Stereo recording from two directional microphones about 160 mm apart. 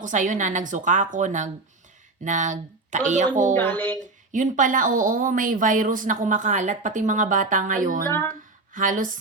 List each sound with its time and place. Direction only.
0.0 s a woman's voice: 50° right (ahead or behind)
3.5 s speech: 15° left (ahead or behind)
4.0 s speech: 50° right (ahead or behind)
8.0 s speech: 15° left (ahead or behind)
8.7 s speech: 55° right (ahead or behind)